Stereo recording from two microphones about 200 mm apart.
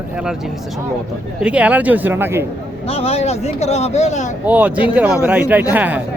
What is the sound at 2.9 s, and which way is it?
Speech, 30° left (ahead or behind).